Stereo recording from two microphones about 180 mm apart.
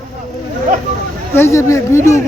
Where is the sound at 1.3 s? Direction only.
15° left (ahead or behind).